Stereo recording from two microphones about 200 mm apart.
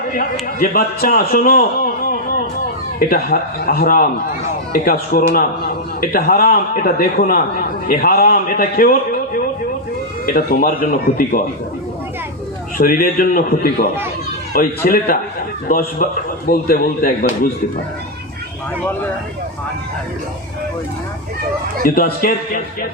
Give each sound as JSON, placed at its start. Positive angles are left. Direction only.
{"t": 0.6, "sound": "a man's voice", "side_deg": 45}
{"t": 3.1, "sound": "a man's voice", "side_deg": 45}
{"t": 12.7, "sound": "a man's voice", "side_deg": 45}
{"t": 14.8, "sound": "a man's voice", "side_deg": 45}
{"t": 21.8, "sound": "a man's voice", "side_deg": 45}